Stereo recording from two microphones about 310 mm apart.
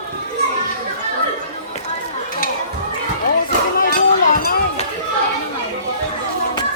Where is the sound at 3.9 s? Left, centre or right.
Left.